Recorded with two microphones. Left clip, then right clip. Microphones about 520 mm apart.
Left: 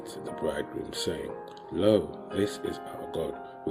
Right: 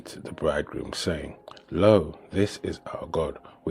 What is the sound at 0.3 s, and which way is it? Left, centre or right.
Speech, right.